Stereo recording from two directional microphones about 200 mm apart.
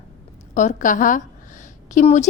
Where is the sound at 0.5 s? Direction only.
40° left (ahead or behind).